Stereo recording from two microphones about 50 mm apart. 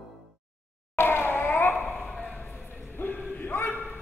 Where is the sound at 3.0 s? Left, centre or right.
Left.